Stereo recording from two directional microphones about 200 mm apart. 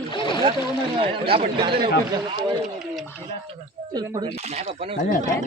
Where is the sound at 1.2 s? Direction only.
25° right (ahead or behind).